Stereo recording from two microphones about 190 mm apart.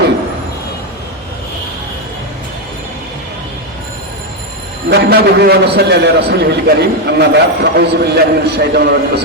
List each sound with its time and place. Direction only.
4.9 s a man's voice: 55° right (ahead or behind)